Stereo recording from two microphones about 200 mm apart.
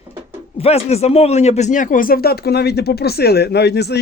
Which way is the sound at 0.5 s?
30° left (ahead or behind).